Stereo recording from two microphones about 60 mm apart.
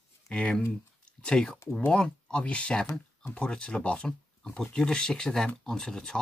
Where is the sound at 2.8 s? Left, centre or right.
Centre.